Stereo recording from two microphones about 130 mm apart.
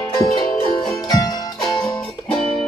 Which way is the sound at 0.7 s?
30° left (ahead or behind).